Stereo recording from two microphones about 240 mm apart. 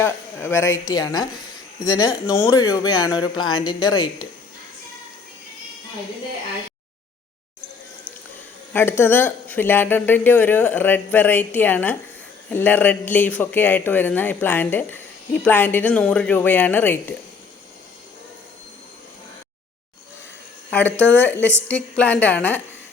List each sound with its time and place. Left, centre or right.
0.0 s a man's voice: centre
8.7 s a man's voice: centre
20.7 s a man's voice: centre